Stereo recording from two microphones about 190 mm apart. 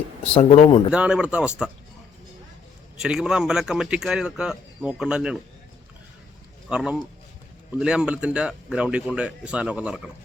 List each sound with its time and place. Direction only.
0.2 s speech: 30° left (ahead or behind)
0.9 s speech: 5° right (ahead or behind)
3.0 s speech: 5° right (ahead or behind)
6.7 s speech: 5° right (ahead or behind)